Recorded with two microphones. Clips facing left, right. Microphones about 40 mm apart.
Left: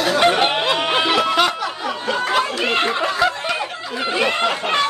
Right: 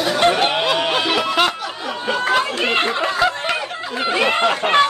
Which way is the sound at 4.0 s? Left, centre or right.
Centre.